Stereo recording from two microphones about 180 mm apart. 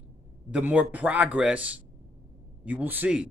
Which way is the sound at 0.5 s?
5° right (ahead or behind).